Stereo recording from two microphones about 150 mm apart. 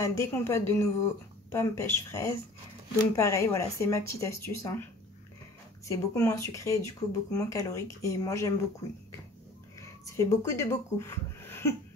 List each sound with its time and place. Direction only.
0.0 s speech: 20° left (ahead or behind)
5.9 s speech: 20° left (ahead or behind)
9.8 s speech: 20° left (ahead or behind)